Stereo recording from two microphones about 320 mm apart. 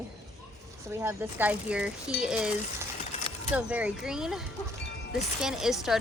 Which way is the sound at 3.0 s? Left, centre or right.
Centre.